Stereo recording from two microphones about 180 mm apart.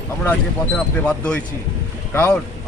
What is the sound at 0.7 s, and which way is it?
Speech, 5° left (ahead or behind).